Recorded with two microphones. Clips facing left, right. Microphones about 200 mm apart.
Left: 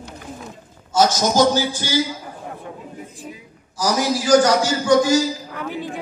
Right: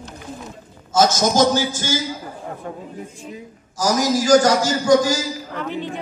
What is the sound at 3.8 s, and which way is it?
Speech, 40° right (ahead or behind).